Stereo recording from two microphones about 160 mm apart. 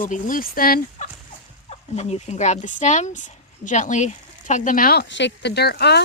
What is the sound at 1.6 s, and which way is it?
Speech, 45° left (ahead or behind).